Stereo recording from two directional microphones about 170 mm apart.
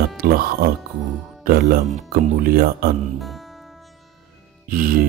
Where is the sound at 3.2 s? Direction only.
Centre (ahead or behind).